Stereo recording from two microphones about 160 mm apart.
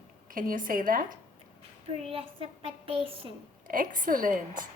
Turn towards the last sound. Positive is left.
turn(degrees=-55)  # may be behind; listen again after turning